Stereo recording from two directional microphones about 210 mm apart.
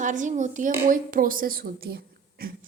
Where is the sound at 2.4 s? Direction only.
45° right (ahead or behind).